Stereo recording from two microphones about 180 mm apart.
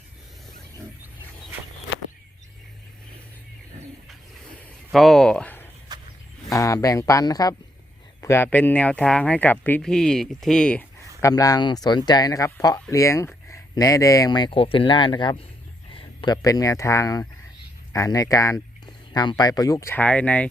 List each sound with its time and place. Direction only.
4.9 s speech: centre (ahead or behind)
5.9 s roaring cats: 20° right (ahead or behind)
6.5 s speech: 15° left (ahead or behind)
11.2 s speech: 20° left (ahead or behind)